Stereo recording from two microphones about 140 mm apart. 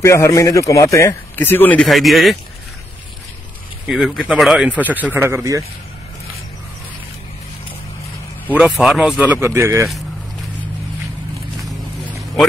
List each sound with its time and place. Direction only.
0.0 s speech: 20° left (ahead or behind)
1.9 s speech: centre (ahead or behind)
3.8 s speech: 5° right (ahead or behind); by 5.6 s 20° right (ahead or behind)
8.5 s speech: centre (ahead or behind); by 9.8 s 20° right (ahead or behind)